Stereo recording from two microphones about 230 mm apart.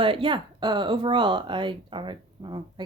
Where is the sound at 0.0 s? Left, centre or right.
Right.